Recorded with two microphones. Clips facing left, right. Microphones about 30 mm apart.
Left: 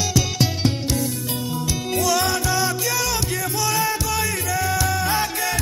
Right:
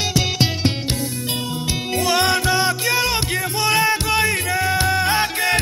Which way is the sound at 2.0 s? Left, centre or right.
Right.